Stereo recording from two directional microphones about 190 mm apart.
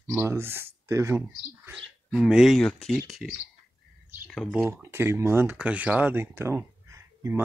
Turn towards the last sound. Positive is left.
turn(degrees=-15)  # may be behind; listen again after turning